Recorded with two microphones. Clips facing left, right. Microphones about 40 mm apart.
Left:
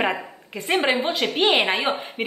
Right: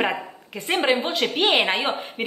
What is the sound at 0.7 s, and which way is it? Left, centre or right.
A woman's voice, centre.